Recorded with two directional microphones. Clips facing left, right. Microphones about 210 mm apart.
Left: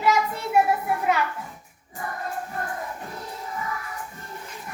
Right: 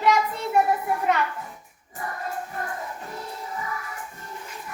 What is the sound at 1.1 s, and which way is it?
Music, 5° left (ahead or behind).